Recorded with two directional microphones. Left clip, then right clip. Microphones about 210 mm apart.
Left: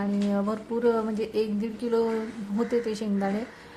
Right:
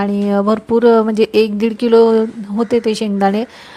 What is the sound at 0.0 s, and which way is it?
A woman's voice, 40° right (ahead or behind).